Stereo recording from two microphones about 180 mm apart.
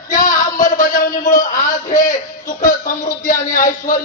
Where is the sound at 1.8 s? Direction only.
45° left (ahead or behind).